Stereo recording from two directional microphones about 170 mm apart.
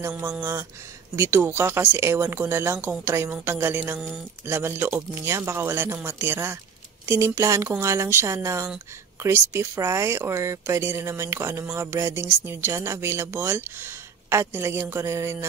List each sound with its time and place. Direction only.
0.0 s speech: 10° right (ahead or behind)